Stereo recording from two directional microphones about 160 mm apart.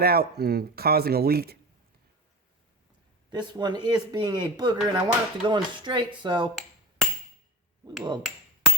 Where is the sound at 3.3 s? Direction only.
25° right (ahead or behind).